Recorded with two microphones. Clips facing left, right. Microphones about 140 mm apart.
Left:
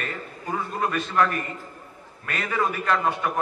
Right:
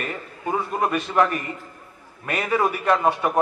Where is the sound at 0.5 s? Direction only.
20° right (ahead or behind).